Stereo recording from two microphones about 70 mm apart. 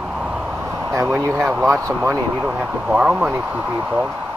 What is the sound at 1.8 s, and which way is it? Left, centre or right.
Speech, right.